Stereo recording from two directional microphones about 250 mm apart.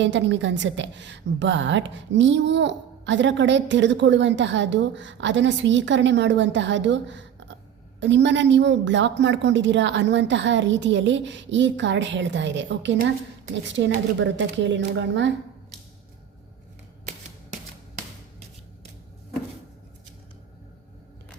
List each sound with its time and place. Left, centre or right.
0.0 s a woman's voice: right